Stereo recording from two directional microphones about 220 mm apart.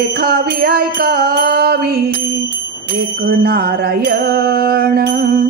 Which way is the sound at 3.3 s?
45° right (ahead or behind).